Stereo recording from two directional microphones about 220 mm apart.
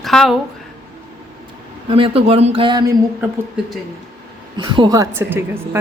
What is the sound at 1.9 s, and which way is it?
Speech, 25° right (ahead or behind).